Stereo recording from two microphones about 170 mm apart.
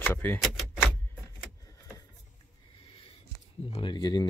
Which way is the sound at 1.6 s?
20° left (ahead or behind).